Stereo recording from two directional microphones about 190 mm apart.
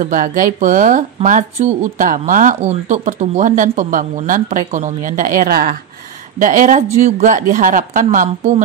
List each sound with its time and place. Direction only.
0.0 s speech: 45° right (ahead or behind)